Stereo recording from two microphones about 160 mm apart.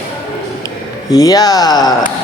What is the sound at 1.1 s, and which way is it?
Speech, 20° left (ahead or behind).